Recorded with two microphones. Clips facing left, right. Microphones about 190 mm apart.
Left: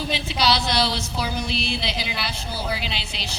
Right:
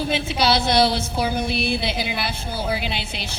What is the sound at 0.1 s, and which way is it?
A woman's voice, 50° right (ahead or behind).